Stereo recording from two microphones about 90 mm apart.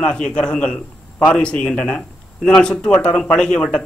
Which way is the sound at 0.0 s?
10° left (ahead or behind).